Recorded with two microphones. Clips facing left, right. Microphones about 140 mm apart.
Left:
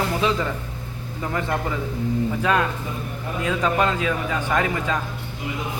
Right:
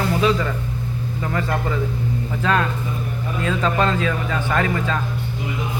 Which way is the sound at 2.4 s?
15° left (ahead or behind).